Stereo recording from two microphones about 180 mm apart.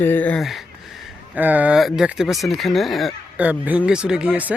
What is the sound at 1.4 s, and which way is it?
Speech, 10° right (ahead or behind).